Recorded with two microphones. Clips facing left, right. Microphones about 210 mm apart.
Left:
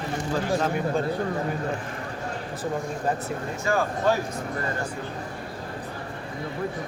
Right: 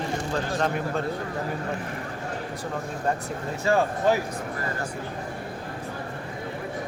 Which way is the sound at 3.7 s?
30° right (ahead or behind).